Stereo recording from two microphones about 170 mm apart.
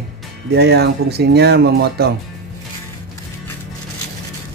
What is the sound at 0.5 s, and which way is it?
Speech, 70° right (ahead or behind).